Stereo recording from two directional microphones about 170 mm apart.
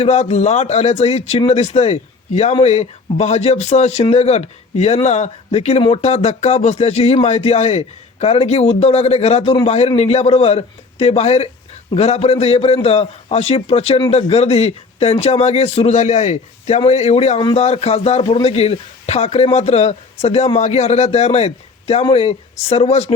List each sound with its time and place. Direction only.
0.0 s speech: 40° left (ahead or behind)